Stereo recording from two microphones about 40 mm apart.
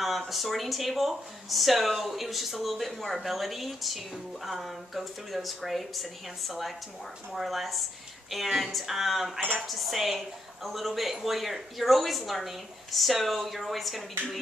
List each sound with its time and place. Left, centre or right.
0.0 s speech: centre